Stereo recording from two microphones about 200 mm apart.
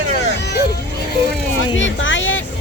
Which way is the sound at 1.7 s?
70° left (ahead or behind).